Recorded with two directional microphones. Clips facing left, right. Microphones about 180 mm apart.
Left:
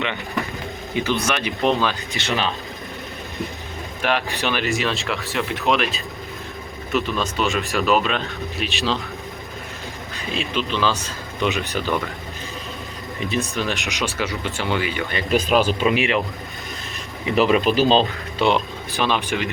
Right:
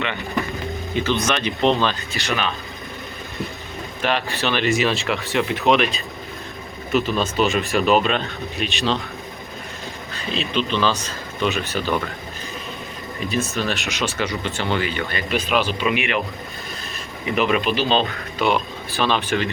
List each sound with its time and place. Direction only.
1.2 s speech: 10° left (ahead or behind)
4.0 s speech: 15° left (ahead or behind)
4.6 s speech: centre (ahead or behind)
10.2 s speech: 10° left (ahead or behind)
13.3 s speech: 15° left (ahead or behind)
15.3 s speech: 40° left (ahead or behind)
17.2 s speech: 30° left (ahead or behind)
18.9 s speech: 15° left (ahead or behind)